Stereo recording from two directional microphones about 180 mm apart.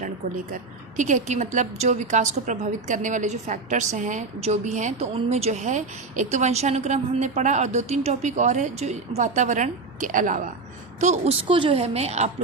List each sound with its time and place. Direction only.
0.5 s a woman's voice: 45° right (ahead or behind)